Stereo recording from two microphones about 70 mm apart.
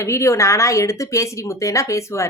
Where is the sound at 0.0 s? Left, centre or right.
Left.